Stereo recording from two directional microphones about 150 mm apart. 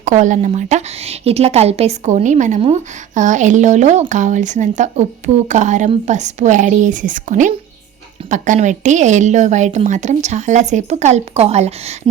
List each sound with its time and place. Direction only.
0.0 s a woman's voice: 55° right (ahead or behind)